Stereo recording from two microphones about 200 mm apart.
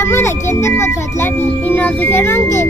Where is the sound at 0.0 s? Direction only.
15° left (ahead or behind).